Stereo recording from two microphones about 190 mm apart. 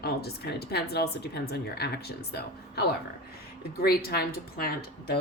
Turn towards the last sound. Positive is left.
turn(degrees=55)  # may be behind; listen again after turning